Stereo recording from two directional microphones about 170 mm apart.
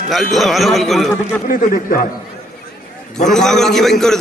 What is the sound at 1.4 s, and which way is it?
Speech, 55° left (ahead or behind).